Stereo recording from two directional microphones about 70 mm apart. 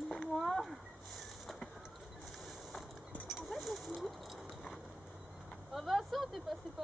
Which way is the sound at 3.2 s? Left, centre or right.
Centre.